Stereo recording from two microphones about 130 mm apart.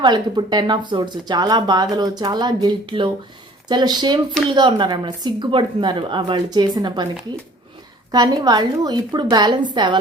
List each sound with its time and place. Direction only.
0.0 s speech: 35° right (ahead or behind)
8.1 s speech: 30° right (ahead or behind)